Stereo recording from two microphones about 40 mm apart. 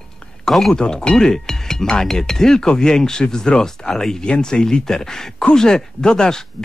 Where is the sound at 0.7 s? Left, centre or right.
Centre.